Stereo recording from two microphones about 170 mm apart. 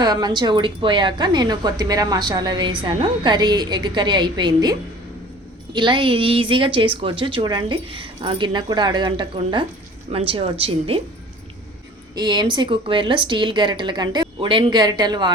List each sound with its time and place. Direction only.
0.0 s a woman's voice: 25° right (ahead or behind)
12.1 s a woman's voice: 25° right (ahead or behind)